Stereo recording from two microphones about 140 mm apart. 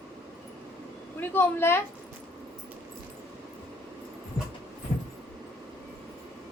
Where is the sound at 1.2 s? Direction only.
15° left (ahead or behind).